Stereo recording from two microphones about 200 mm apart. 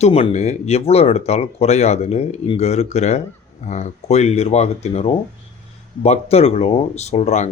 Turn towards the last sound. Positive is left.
turn(degrees=35)  # may be behind; listen again after turning